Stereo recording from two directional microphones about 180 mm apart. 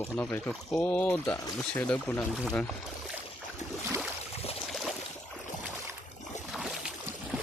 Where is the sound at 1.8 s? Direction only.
5° left (ahead or behind).